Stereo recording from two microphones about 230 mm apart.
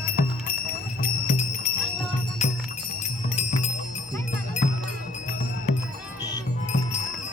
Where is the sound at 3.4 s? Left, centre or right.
Left.